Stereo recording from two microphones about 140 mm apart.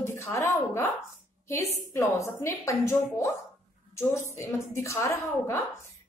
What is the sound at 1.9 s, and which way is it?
A woman's voice, 20° left (ahead or behind).